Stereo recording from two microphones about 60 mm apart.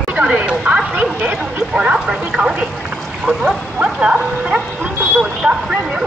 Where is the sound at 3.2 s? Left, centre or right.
Centre.